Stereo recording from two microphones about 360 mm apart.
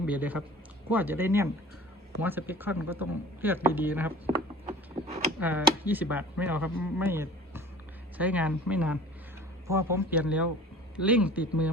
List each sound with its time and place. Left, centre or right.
0.0 s speech: centre
4.6 s a sound: centre
5.4 s speech: centre